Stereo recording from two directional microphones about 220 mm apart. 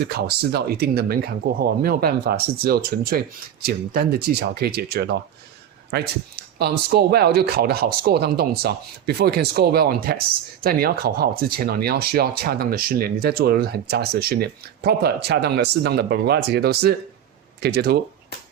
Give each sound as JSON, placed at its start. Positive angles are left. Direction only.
{"t": 0.2, "sound": "speech", "side_deg": -45}